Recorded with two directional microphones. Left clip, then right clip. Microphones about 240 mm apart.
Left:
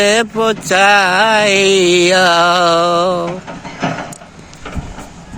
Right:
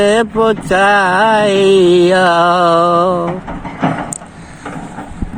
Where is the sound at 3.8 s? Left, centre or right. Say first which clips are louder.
Right 3 dB; left.